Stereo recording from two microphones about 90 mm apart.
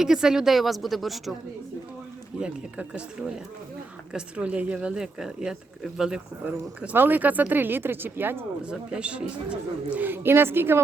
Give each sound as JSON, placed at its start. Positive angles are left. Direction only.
{"t": 0.0, "sound": "speech", "side_deg": -5}
{"t": 2.4, "sound": "speech", "side_deg": -10}
{"t": 8.6, "sound": "speech", "side_deg": -10}